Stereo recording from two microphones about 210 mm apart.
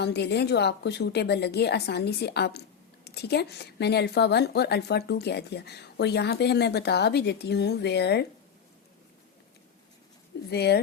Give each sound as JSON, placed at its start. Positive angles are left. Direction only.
{"t": 0.0, "sound": "a woman's voice", "side_deg": 50}
{"t": 10.5, "sound": "a woman's voice", "side_deg": 50}